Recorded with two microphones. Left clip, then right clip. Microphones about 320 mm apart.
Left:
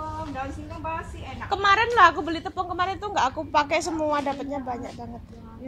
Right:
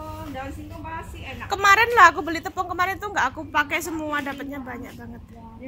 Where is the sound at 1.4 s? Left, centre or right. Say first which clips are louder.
Right 3 dB; centre.